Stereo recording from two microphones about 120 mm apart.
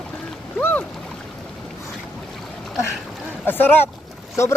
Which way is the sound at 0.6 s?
15° left (ahead or behind).